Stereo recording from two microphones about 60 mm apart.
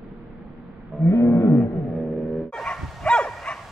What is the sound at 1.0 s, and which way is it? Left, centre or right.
Roaring cats, left.